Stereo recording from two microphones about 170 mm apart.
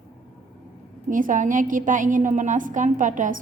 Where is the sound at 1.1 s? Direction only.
50° right (ahead or behind).